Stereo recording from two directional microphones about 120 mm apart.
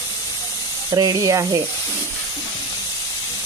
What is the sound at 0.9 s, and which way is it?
Speech, 30° right (ahead or behind).